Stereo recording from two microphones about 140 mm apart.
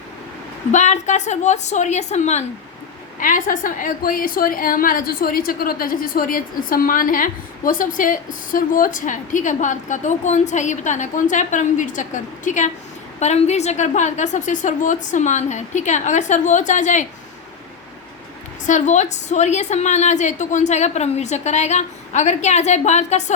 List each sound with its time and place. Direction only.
0.7 s a woman's voice: 55° left (ahead or behind)
3.2 s a woman's voice: 75° left (ahead or behind)
18.6 s a woman's voice: 60° left (ahead or behind)